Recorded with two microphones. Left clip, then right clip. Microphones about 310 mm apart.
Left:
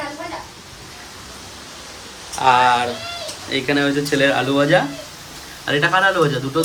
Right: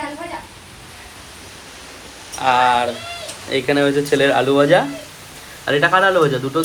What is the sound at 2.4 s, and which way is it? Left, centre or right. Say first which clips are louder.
Speech: left 1 dB; centre.